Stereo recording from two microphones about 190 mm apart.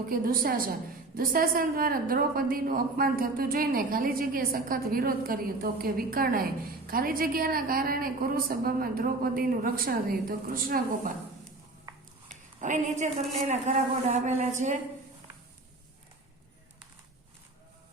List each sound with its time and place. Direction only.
0.1 s a woman's voice: 50° right (ahead or behind)
11.9 s a sound: 20° right (ahead or behind)
12.5 s a woman's voice: 40° right (ahead or behind)